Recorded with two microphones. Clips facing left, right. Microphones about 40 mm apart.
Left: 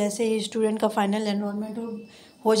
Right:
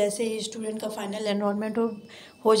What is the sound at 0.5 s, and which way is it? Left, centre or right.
Speech, left.